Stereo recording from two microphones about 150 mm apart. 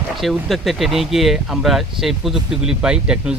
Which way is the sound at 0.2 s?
Centre (ahead or behind).